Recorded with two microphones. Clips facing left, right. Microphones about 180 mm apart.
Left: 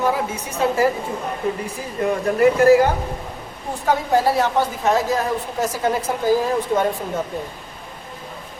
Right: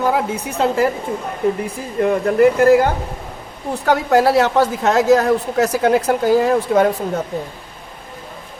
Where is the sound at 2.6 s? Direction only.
55° right (ahead or behind).